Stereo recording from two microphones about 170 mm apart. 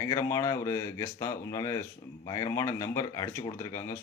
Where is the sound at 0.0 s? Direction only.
15° left (ahead or behind).